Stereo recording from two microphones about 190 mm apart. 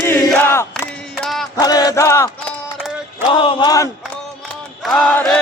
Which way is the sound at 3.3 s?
25° left (ahead or behind).